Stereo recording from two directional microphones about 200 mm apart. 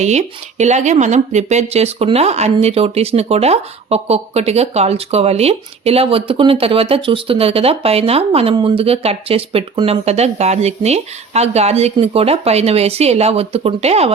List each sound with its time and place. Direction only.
0.0 s speech: 35° right (ahead or behind)